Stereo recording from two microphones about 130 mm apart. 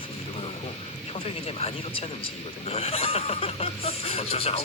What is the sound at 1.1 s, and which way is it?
Speech, 50° left (ahead or behind).